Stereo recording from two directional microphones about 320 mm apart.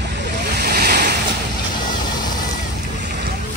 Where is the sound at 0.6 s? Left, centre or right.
Right.